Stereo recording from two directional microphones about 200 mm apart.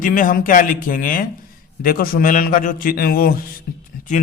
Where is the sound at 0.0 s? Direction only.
40° left (ahead or behind).